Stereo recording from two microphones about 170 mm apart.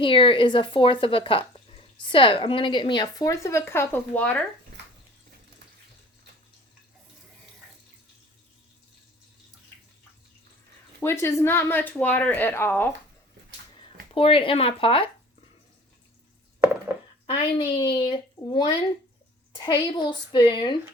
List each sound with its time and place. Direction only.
0.0 s a woman's voice: 30° left (ahead or behind); by 4.4 s 10° left (ahead or behind)
11.0 s speech: 15° left (ahead or behind)
14.1 s speech: 35° left (ahead or behind)
17.2 s a woman's voice: 30° left (ahead or behind)